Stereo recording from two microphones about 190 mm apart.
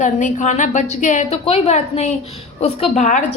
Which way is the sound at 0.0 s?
40° left (ahead or behind).